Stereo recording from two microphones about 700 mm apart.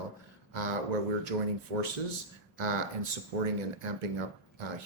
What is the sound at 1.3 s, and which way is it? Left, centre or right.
Speech, right.